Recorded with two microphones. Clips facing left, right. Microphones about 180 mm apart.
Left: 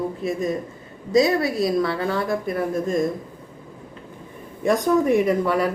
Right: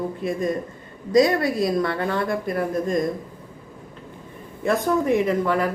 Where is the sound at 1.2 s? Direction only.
5° left (ahead or behind).